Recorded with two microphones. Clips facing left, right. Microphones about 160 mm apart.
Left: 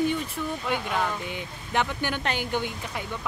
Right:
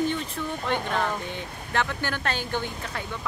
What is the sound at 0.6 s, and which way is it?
Speech, 10° left (ahead or behind).